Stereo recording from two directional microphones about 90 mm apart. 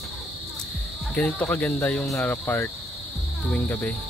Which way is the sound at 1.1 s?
15° left (ahead or behind).